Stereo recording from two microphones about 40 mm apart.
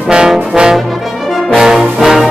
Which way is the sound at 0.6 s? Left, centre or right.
Right.